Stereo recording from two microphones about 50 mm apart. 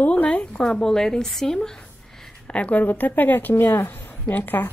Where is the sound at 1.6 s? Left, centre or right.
Centre.